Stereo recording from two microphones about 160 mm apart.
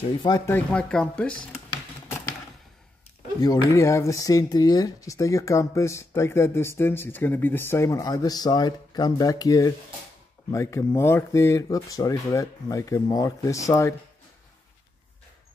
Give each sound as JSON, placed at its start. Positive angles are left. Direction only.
{"t": 0.5, "sound": "speech", "side_deg": 10}
{"t": 3.3, "sound": "speech", "side_deg": 20}